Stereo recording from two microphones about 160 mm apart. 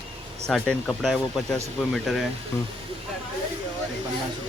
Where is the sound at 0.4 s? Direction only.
5° left (ahead or behind).